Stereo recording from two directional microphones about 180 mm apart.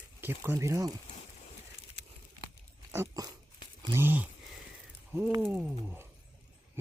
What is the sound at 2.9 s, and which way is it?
Dog, 20° right (ahead or behind).